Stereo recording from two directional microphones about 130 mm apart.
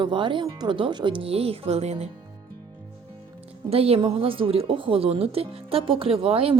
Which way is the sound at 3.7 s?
50° right (ahead or behind).